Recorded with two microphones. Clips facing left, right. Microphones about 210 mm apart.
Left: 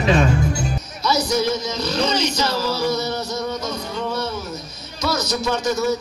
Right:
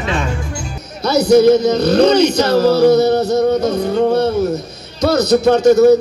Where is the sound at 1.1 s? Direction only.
60° right (ahead or behind).